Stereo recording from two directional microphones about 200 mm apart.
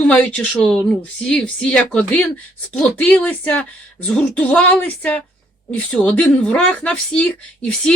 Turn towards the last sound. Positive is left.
turn(degrees=5)  # may be behind; listen again after turning